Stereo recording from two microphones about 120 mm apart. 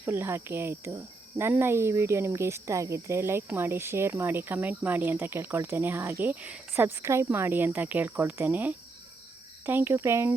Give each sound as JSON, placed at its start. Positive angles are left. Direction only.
{"t": 0.0, "sound": "speech", "side_deg": -20}